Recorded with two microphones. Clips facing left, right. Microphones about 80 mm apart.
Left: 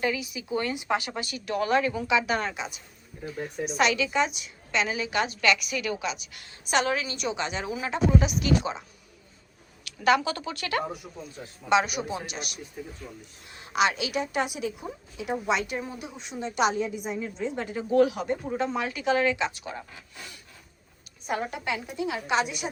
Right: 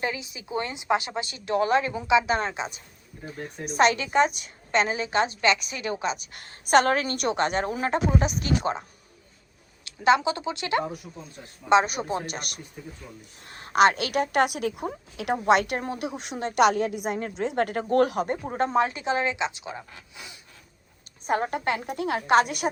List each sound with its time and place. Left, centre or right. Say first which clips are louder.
0.0 s a woman's voice: left 2 dB; right
9.8 s speech: right 2 dB; right
11.7 s a woman's voice: right 3 dB; right; by 19.8 s centre
21.2 s a woman's voice: right 5 dB; right